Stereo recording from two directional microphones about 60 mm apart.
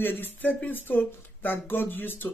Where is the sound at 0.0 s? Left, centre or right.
Left.